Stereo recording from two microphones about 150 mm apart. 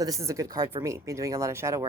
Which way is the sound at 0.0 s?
20° right (ahead or behind).